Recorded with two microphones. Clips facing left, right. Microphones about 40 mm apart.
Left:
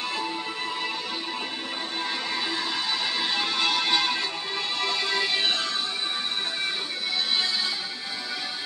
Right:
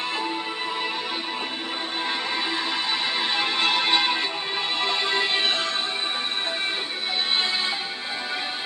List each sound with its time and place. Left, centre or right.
2.0 s music: right